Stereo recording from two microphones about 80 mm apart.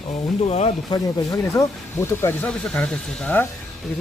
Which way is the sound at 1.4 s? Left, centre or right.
Left.